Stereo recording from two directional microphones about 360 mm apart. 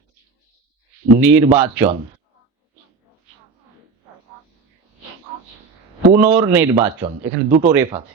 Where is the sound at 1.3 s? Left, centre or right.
Centre.